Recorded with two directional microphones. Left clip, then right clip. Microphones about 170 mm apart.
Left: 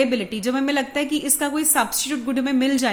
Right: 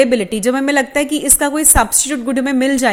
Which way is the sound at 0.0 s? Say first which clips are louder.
Right 8 dB; 35° right (ahead or behind).